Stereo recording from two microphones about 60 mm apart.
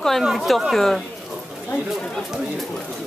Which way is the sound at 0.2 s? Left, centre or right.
Centre.